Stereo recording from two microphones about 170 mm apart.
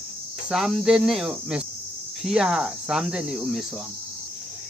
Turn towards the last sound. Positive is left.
turn(degrees=0)  # may be behind; listen again after turning